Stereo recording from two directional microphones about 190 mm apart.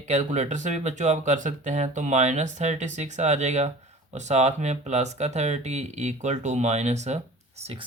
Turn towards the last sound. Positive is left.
turn(degrees=-30)  # may be behind; listen again after turning